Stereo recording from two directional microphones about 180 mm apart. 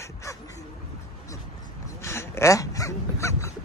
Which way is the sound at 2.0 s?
15° left (ahead or behind).